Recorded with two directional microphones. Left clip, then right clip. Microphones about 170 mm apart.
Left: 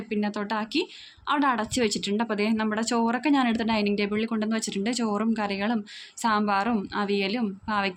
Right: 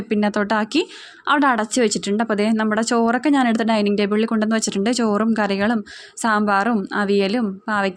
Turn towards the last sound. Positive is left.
turn(degrees=-35)  # may be behind; listen again after turning